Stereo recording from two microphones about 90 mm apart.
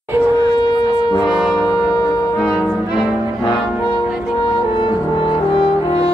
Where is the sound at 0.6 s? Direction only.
50° left (ahead or behind).